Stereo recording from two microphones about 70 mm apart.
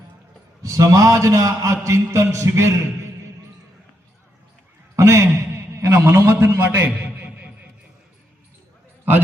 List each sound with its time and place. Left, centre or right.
0.6 s a man's voice: right
4.9 s a man's voice: right
6.8 s a sound: right